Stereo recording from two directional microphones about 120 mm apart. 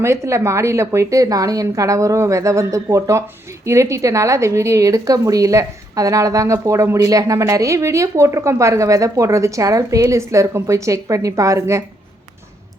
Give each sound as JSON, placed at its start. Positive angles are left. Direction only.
{"t": 0.0, "sound": "a woman's voice", "side_deg": -25}